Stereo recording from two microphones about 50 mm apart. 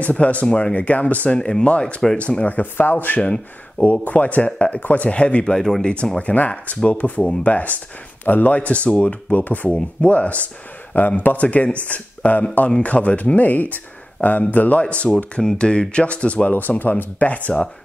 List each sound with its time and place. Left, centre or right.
0.0 s speech: left
5.6 s speech: centre
6.1 s speech: left
9.7 s speech: left
16.5 s speech: left